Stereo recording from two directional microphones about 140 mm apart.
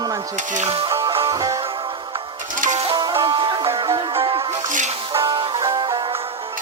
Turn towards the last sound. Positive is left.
turn(degrees=-30)  # may be behind; listen again after turning